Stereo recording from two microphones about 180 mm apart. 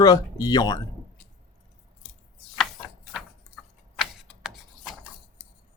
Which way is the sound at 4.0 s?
Centre (ahead or behind).